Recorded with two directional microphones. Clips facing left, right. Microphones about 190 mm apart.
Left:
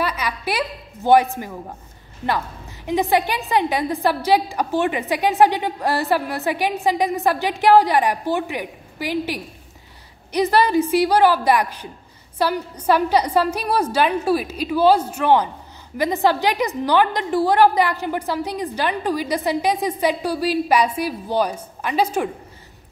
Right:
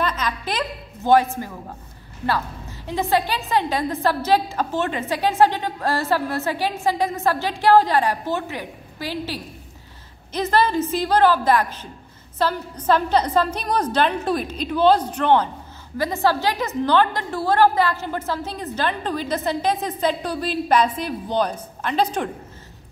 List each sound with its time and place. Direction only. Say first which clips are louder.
0.0 s a woman's voice: left 1 dB; 10° left (ahead or behind)